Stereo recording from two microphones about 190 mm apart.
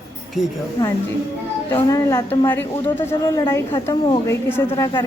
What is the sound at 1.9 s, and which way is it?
A woman's voice, 15° left (ahead or behind).